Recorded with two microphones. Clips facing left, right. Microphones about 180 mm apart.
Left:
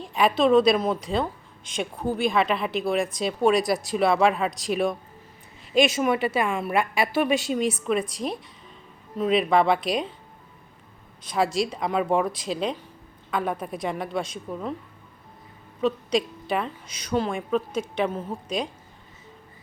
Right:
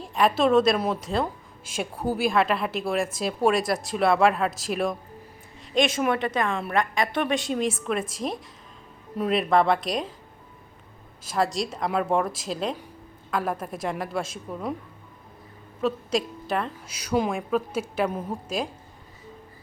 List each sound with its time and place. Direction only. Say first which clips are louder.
0.0 s a woman's voice: left 1 dB; centre (ahead or behind)
11.2 s a woman's voice: left 2 dB; centre (ahead or behind)
15.8 s a woman's voice: left 2 dB; centre (ahead or behind)